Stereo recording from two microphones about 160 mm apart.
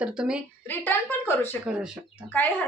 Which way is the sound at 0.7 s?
15° left (ahead or behind).